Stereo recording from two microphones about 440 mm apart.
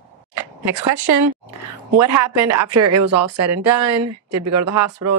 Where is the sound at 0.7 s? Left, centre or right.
Right.